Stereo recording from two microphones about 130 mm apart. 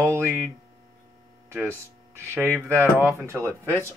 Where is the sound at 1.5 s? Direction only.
20° right (ahead or behind).